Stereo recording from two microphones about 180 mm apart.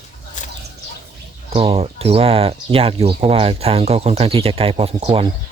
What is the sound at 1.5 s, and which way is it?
Speech, 35° right (ahead or behind).